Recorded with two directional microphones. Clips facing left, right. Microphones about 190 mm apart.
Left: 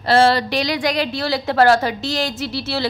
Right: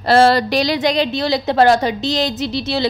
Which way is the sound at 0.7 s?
20° right (ahead or behind).